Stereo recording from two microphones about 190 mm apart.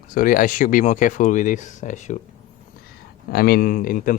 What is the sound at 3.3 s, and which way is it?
Speech, 50° left (ahead or behind).